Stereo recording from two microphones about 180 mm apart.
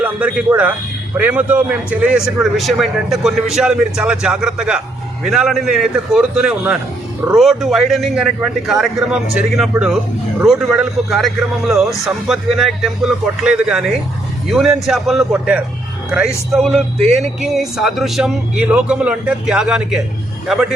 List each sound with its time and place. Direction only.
0.0 s a man's voice: 5° right (ahead or behind)